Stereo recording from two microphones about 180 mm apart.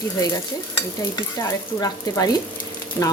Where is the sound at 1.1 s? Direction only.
20° left (ahead or behind).